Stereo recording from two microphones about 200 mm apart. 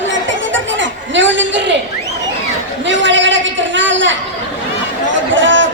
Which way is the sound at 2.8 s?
65° right (ahead or behind).